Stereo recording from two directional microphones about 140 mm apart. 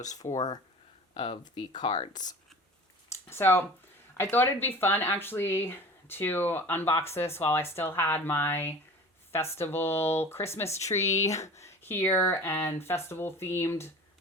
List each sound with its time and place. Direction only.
0.1 s speech: 25° left (ahead or behind)
3.1 s speech: 20° left (ahead or behind)